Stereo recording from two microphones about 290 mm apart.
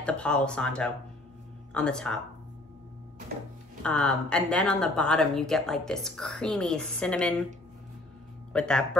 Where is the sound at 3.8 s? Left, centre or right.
Centre.